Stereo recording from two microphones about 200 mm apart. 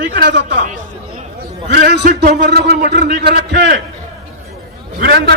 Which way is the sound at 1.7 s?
55° right (ahead or behind).